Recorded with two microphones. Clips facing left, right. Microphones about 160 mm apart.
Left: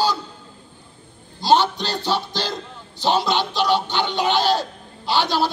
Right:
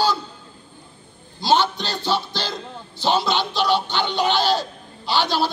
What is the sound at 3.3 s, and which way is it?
Speech, 40° left (ahead or behind).